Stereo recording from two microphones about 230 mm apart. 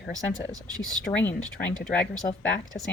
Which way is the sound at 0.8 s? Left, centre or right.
Centre.